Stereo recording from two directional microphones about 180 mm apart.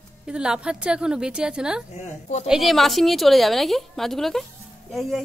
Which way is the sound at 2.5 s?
Centre (ahead or behind).